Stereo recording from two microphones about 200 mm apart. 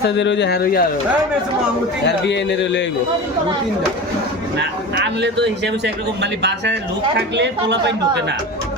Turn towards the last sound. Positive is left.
turn(degrees=-60)  # may be behind; listen again after turning